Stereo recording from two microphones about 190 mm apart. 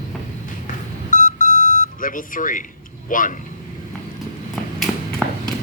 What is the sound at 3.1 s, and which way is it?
Speech, 45° left (ahead or behind).